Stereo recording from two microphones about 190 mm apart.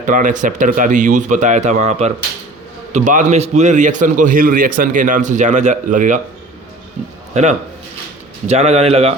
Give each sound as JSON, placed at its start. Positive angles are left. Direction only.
{"t": 0.0, "sound": "a man's voice", "side_deg": -45}
{"t": 7.3, "sound": "a man's voice", "side_deg": -35}